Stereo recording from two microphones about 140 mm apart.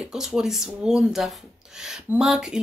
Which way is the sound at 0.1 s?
5° right (ahead or behind).